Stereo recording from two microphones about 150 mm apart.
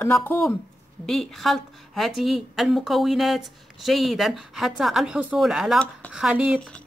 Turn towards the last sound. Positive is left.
turn(degrees=-5)  # may be behind; listen again after turning